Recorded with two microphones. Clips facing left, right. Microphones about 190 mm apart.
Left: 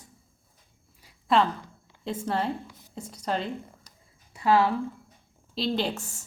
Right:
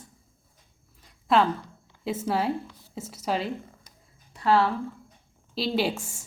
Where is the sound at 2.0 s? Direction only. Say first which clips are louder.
Right 2 dB; 5° right (ahead or behind).